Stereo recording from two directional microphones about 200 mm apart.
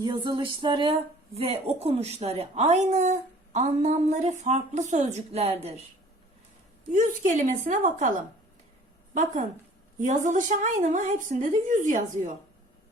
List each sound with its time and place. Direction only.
0.0 s a woman's voice: 25° right (ahead or behind)
6.9 s a woman's voice: 40° right (ahead or behind)
9.1 s a woman's voice: 40° right (ahead or behind)